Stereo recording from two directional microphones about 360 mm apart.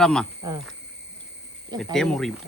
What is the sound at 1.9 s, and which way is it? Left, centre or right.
Speech, centre.